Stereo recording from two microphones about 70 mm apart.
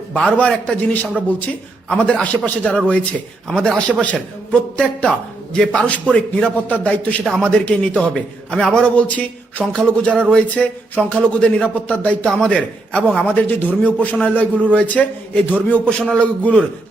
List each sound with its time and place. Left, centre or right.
0.1 s a man's voice: centre
10.9 s a sound: centre
11.3 s a man's voice: centre